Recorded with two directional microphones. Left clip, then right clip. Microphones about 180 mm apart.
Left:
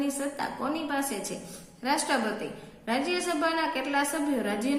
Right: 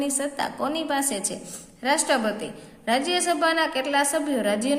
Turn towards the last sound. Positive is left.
turn(degrees=-45)  # may be behind; listen again after turning